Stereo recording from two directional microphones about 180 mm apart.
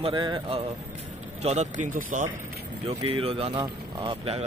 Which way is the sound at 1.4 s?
40° right (ahead or behind).